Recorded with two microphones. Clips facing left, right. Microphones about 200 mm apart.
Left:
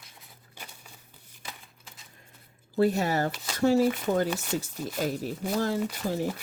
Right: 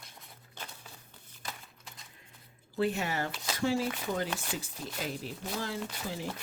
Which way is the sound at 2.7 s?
40° left (ahead or behind).